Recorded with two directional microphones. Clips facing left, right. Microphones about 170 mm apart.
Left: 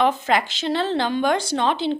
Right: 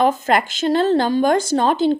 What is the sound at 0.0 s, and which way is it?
A woman's voice, 45° right (ahead or behind).